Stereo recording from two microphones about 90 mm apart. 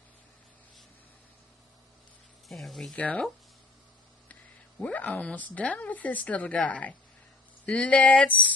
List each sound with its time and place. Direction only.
2.4 s speech: centre (ahead or behind)
3.0 s a woman's voice: 15° left (ahead or behind)
4.7 s a woman's voice: 15° left (ahead or behind)